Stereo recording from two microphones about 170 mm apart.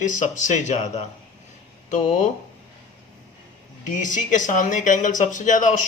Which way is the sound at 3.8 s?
50° left (ahead or behind).